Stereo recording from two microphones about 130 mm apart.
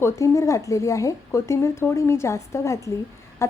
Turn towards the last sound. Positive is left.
turn(degrees=20)  # may be behind; listen again after turning